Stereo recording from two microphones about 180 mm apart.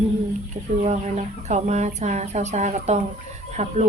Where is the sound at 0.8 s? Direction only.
40° right (ahead or behind).